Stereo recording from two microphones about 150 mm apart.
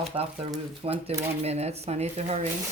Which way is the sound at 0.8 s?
40° right (ahead or behind).